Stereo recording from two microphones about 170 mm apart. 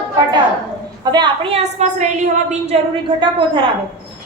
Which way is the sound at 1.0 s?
25° right (ahead or behind).